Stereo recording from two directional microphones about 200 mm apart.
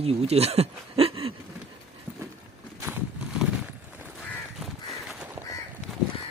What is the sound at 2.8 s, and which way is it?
Horse, 5° right (ahead or behind).